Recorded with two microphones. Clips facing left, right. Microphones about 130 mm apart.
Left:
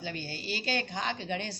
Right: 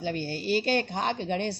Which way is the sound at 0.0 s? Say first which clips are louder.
Right 8 dB; 60° right (ahead or behind).